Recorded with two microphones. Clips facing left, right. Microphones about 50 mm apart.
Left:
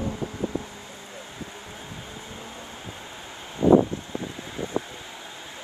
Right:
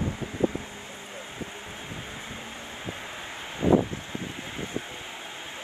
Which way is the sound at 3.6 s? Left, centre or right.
Right.